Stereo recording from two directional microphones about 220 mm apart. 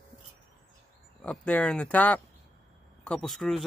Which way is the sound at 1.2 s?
5° left (ahead or behind).